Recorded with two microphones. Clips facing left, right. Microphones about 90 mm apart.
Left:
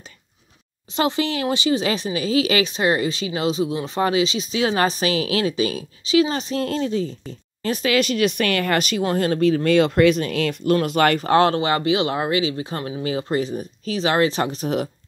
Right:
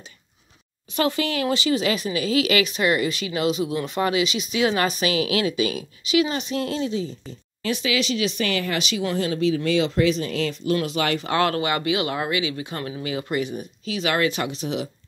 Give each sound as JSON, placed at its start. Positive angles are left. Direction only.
{"t": 0.9, "sound": "speech", "side_deg": 25}